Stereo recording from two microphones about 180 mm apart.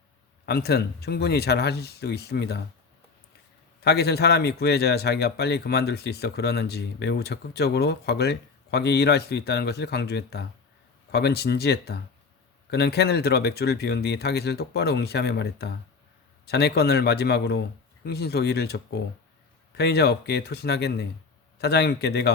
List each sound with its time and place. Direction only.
0.4 s a man's voice: 60° left (ahead or behind)
3.8 s a man's voice: 65° left (ahead or behind)